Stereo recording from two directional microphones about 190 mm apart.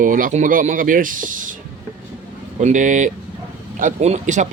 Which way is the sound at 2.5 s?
40° right (ahead or behind).